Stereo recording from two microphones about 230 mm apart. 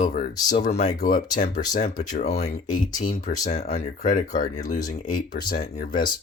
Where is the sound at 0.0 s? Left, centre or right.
Left.